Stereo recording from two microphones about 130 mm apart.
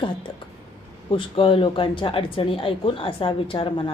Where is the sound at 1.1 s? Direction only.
40° left (ahead or behind).